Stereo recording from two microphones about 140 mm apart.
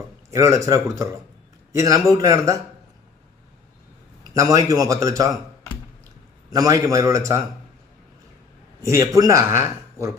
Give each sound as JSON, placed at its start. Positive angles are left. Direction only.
{"t": 0.3, "sound": "a man's voice", "side_deg": -20}
{"t": 4.2, "sound": "a man's voice", "side_deg": -25}
{"t": 6.5, "sound": "a man's voice", "side_deg": -25}
{"t": 8.8, "sound": "a man's voice", "side_deg": -20}